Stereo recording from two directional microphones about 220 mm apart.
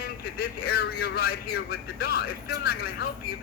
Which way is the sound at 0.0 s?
45° left (ahead or behind).